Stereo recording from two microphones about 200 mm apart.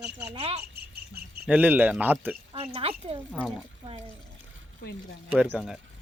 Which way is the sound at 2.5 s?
30° right (ahead or behind).